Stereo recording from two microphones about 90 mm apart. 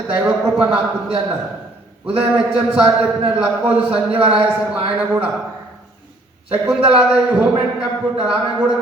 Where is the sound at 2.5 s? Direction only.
10° right (ahead or behind).